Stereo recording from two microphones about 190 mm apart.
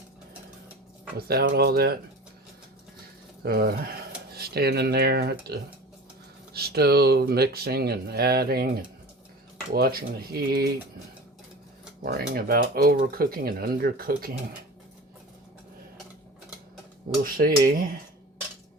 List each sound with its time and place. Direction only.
1.3 s speech: 55° right (ahead or behind)
3.4 s speech: 55° right (ahead or behind)
12.0 s speech: 55° right (ahead or behind)
17.2 s speech: 50° right (ahead or behind)